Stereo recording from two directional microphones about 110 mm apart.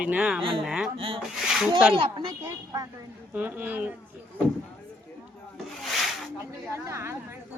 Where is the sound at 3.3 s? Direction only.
15° right (ahead or behind).